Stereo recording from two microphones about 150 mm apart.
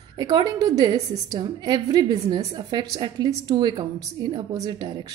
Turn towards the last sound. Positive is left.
turn(degrees=-30)  # may be behind; listen again after turning